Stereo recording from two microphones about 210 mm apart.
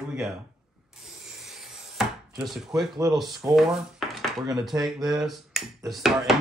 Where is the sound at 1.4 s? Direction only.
Centre (ahead or behind).